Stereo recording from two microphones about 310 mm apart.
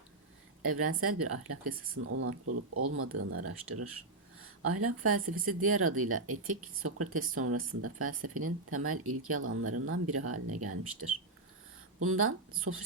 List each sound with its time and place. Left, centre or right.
0.6 s speech: right
11.9 s speech: right